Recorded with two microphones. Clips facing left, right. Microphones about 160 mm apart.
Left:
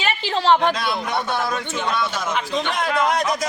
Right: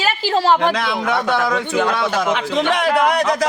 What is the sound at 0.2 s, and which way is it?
Speech, 5° right (ahead or behind).